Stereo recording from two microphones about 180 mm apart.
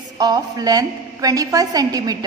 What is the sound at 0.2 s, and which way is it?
A woman's voice, 20° right (ahead or behind).